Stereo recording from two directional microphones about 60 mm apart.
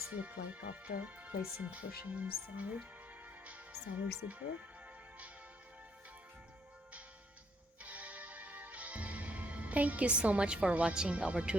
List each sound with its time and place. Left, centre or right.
0.1 s speech: right
3.2 s music: right
3.9 s speech: right
7.8 s music: right